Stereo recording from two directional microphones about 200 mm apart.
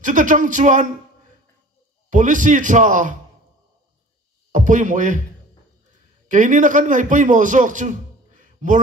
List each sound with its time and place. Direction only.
0.0 s speech: 40° right (ahead or behind)
2.0 s speech: 40° right (ahead or behind)
4.6 s speech: 40° right (ahead or behind)
6.3 s speech: 40° right (ahead or behind)